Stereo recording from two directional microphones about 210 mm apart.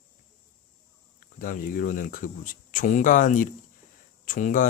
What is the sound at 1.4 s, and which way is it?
Speech, 40° left (ahead or behind).